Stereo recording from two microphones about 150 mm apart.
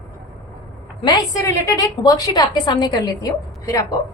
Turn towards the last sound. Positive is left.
turn(degrees=20)  # may be behind; listen again after turning